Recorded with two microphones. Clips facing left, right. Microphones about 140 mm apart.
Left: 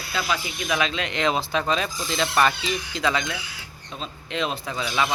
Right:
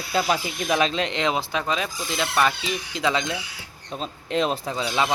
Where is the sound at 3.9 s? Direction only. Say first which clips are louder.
Right 5 dB; 40° right (ahead or behind).